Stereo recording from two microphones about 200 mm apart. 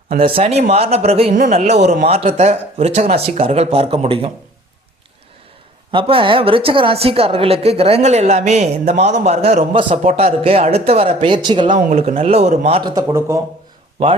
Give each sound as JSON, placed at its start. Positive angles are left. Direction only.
{"t": 0.2, "sound": "speech", "side_deg": -30}
{"t": 5.9, "sound": "a woman's voice", "side_deg": -25}
{"t": 11.9, "sound": "a woman's voice", "side_deg": -40}